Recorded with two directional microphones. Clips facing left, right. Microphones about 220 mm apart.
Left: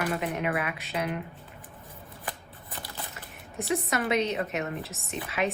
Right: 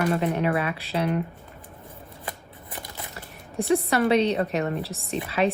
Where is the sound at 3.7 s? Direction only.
30° right (ahead or behind).